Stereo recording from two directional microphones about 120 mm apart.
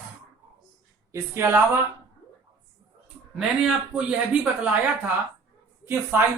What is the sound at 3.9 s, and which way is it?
Speech, 10° right (ahead or behind).